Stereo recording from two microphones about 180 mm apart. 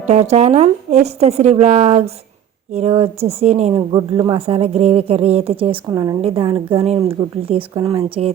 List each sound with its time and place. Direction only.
0.1 s speech: 35° right (ahead or behind)
3.8 s speech: 25° right (ahead or behind)
5.9 s a woman's voice: 20° right (ahead or behind); by 8.3 s 35° right (ahead or behind)